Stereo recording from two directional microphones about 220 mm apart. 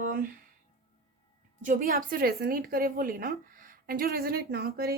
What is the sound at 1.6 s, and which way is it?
A woman's voice, 35° right (ahead or behind).